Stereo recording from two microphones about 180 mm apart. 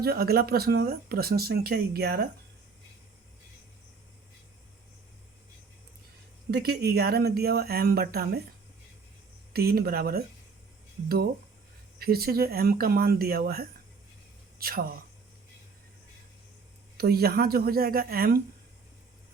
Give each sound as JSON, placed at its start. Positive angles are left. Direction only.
{"t": 0.0, "sound": "speech", "side_deg": -60}
{"t": 6.5, "sound": "speech", "side_deg": -65}
{"t": 9.5, "sound": "speech", "side_deg": -60}
{"t": 11.9, "sound": "speech", "side_deg": -60}
{"t": 17.0, "sound": "speech", "side_deg": -60}